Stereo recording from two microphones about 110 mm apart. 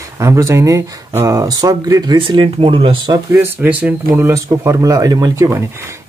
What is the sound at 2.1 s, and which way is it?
Speech, 50° right (ahead or behind).